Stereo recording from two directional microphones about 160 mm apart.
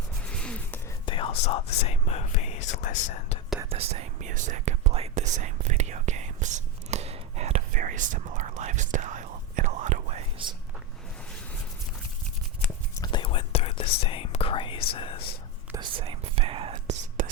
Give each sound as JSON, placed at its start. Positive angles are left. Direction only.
{"t": 0.3, "sound": "music", "side_deg": 5}
{"t": 1.0, "sound": "speech", "side_deg": 35}
{"t": 3.7, "sound": "speech", "side_deg": -40}
{"t": 13.0, "sound": "whispering", "side_deg": 30}
{"t": 14.9, "sound": "speech", "side_deg": 35}
{"t": 15.7, "sound": "speech", "side_deg": -30}
{"t": 17.2, "sound": "whispering", "side_deg": -60}